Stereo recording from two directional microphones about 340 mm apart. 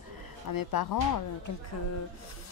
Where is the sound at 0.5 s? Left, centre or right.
Left.